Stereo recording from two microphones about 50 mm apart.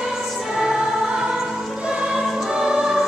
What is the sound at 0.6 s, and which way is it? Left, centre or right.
Music, centre.